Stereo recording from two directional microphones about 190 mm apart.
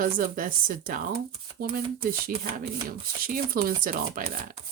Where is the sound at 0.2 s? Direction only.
45° right (ahead or behind).